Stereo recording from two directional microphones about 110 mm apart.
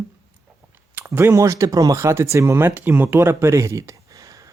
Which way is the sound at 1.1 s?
25° right (ahead or behind).